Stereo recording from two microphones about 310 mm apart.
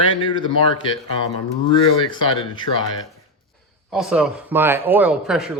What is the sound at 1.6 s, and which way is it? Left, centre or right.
Speech, centre.